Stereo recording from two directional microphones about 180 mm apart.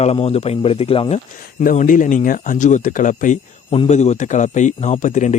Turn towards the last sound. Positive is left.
turn(degrees=45)  # may be behind; listen again after turning